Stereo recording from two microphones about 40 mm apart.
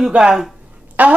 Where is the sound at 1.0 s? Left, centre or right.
Right.